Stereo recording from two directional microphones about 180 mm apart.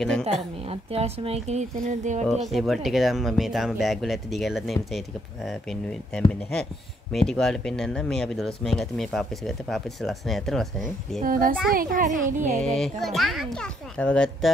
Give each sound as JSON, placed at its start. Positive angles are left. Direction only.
{"t": 0.2, "sound": "speech", "side_deg": -35}
{"t": 2.5, "sound": "speech", "side_deg": 0}
{"t": 11.2, "sound": "a woman's voice", "side_deg": -50}
{"t": 12.5, "sound": "speech", "side_deg": 5}